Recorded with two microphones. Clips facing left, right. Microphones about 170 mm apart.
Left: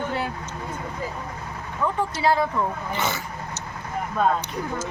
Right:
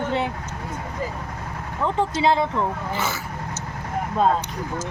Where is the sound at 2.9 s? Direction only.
5° right (ahead or behind).